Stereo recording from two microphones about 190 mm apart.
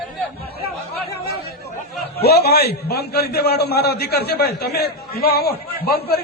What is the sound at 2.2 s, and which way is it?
A man's voice, 55° left (ahead or behind).